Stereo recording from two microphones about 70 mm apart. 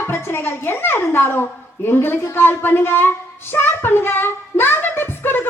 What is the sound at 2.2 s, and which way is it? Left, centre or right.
A woman's voice, left.